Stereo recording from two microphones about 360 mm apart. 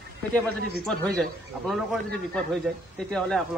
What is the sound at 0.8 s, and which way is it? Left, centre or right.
A man's voice, centre.